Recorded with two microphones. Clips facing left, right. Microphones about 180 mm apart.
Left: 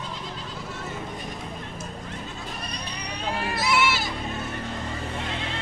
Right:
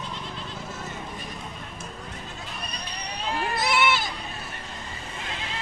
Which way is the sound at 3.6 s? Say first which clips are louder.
Even; 50° right (ahead or behind).